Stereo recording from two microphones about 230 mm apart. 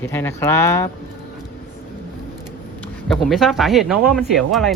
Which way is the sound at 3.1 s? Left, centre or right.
Centre.